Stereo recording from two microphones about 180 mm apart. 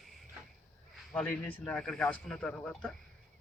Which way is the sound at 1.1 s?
5° left (ahead or behind).